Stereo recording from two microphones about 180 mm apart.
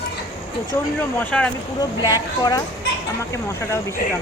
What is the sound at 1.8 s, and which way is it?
Speech, 20° left (ahead or behind).